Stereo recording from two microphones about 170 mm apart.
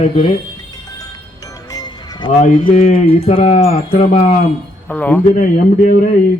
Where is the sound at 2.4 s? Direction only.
40° left (ahead or behind).